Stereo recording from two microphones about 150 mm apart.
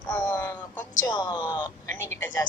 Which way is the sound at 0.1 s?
15° left (ahead or behind).